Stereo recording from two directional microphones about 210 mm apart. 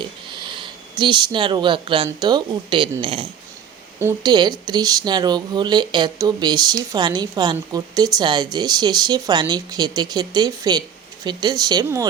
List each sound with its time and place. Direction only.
0.0 s speech: 25° right (ahead or behind)